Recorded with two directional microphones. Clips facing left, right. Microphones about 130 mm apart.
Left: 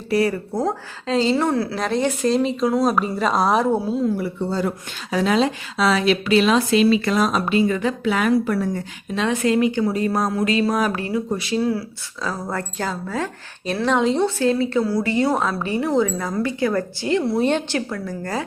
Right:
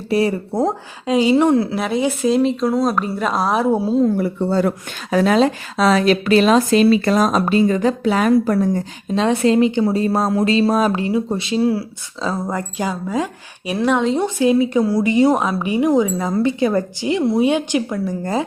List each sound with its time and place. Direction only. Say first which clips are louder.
0.1 s a woman's voice: right 2 dB; 25° right (ahead or behind)
1.8 s a woman's voice: right 2 dB; 5° right (ahead or behind)
4.0 s speech: right 5 dB; 55° right (ahead or behind)
5.1 s a woman's voice: right 4 dB; 50° right (ahead or behind); by 11.8 s 25° right (ahead or behind)
12.5 s a woman's voice: right 3 dB; 15° right (ahead or behind)
14.3 s a woman's voice: right 4 dB; 15° right (ahead or behind)